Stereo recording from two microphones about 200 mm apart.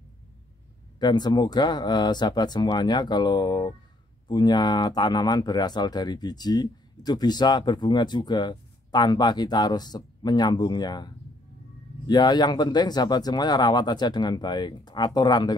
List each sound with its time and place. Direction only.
0.9 s speech: 20° left (ahead or behind)
12.1 s speech: 20° left (ahead or behind)